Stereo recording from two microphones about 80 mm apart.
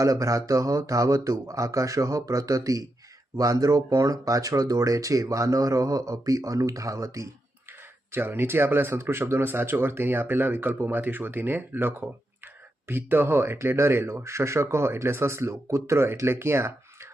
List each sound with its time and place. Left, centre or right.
0.0 s speech: right
7.7 s speech: right